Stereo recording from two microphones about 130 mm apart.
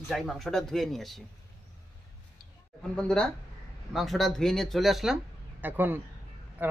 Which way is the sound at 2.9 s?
5° left (ahead or behind).